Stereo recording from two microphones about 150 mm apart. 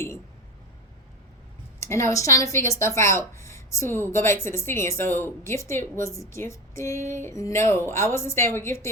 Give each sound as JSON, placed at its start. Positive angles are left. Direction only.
{"t": 1.8, "sound": "a woman's voice", "side_deg": 20}